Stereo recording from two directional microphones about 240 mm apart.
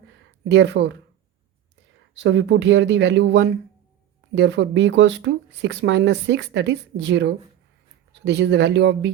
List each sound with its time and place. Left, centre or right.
0.4 s speech: right
2.1 s speech: right